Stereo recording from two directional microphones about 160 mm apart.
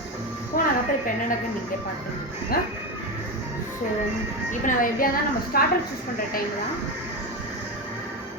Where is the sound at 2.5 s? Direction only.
70° left (ahead or behind).